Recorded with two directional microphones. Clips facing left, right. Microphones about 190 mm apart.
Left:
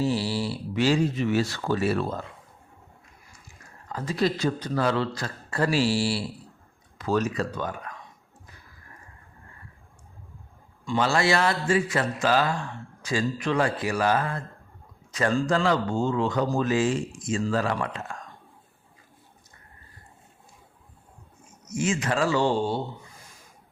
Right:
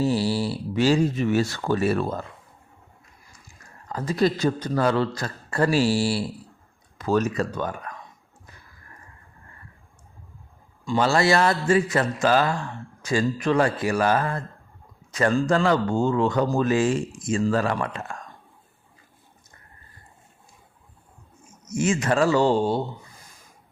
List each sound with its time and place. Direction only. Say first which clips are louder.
0.0 s speech: right 3 dB; 40° right (ahead or behind)
3.9 s speech: right 3 dB; 40° right (ahead or behind)
10.8 s a man's voice: right 3 dB; 40° right (ahead or behind)
21.8 s speech: right 4 dB; 50° right (ahead or behind)